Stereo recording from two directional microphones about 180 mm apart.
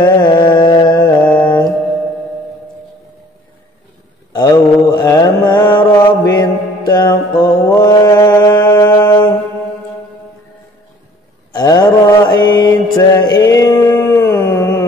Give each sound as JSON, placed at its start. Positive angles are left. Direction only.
{"t": 0.0, "sound": "music", "side_deg": 25}
{"t": 1.1, "sound": "mantra", "side_deg": 5}
{"t": 4.3, "sound": "mantra", "side_deg": 20}
{"t": 9.0, "sound": "music", "side_deg": 25}
{"t": 11.5, "sound": "mantra", "side_deg": 20}